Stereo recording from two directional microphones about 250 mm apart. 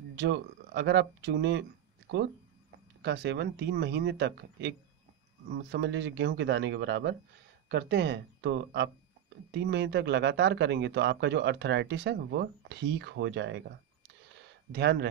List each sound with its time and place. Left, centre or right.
0.1 s speech: right
14.7 s speech: right